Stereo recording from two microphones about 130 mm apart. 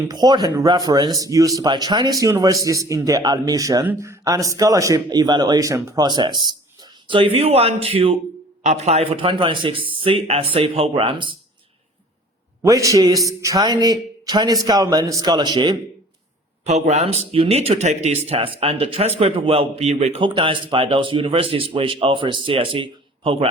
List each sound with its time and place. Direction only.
0.1 s a man's voice: 30° right (ahead or behind)
7.2 s speech: 50° right (ahead or behind)
12.6 s a man's voice: 25° right (ahead or behind)
16.6 s speech: 60° right (ahead or behind)
20.2 s speech: 40° right (ahead or behind)